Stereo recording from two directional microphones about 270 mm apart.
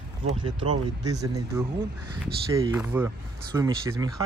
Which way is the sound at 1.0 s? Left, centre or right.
Centre.